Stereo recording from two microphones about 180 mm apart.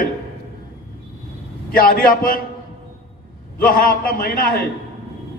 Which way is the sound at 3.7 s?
50° left (ahead or behind).